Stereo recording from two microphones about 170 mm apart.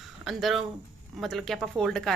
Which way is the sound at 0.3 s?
Centre (ahead or behind).